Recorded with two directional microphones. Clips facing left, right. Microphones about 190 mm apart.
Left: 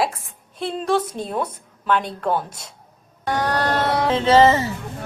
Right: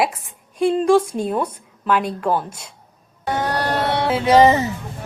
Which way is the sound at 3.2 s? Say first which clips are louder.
Even; 10° right (ahead or behind).